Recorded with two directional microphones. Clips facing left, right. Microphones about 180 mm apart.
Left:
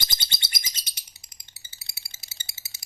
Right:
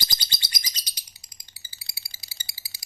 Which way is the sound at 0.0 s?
25° left (ahead or behind).